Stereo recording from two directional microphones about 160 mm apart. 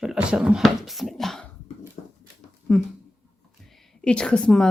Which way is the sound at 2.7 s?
Centre (ahead or behind).